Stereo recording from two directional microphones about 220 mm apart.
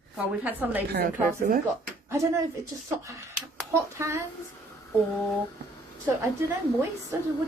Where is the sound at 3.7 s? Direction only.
10° right (ahead or behind).